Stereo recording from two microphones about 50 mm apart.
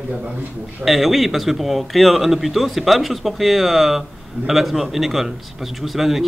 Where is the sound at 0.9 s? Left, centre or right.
Centre.